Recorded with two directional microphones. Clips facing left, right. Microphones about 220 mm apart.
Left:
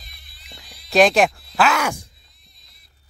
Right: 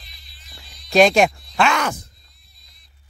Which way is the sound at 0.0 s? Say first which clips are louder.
Left 1 dB; 55° left (ahead or behind).